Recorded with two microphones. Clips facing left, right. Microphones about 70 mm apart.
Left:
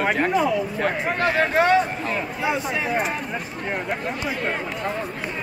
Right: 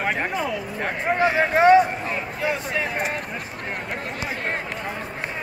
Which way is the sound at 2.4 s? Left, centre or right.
Centre.